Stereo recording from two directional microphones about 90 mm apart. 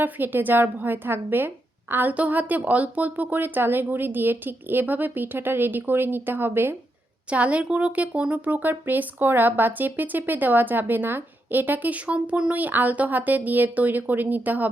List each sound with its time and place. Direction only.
0.0 s speech: 20° right (ahead or behind)
7.3 s speech: 15° right (ahead or behind)